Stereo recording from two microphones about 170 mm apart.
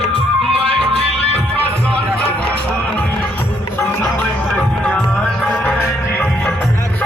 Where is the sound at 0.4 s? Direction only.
Centre (ahead or behind).